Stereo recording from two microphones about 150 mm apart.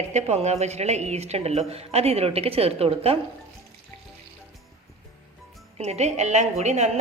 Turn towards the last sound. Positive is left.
turn(degrees=-50)  # may be behind; listen again after turning